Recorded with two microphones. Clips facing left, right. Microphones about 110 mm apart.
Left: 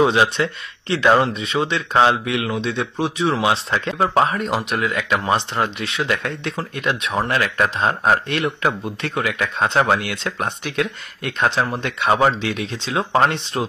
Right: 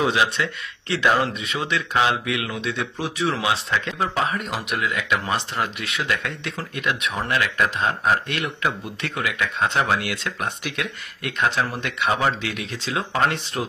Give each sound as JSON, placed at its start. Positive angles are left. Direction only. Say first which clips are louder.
{"t": 0.0, "sound": "speech", "louder": "left 5 dB", "side_deg": 30}
{"t": 3.4, "sound": "a man's voice", "louder": "left 4 dB", "side_deg": 35}